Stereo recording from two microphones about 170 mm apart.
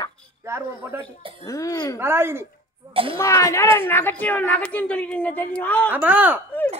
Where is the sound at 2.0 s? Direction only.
15° right (ahead or behind).